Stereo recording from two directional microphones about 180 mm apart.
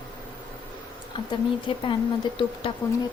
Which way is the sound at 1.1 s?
25° left (ahead or behind).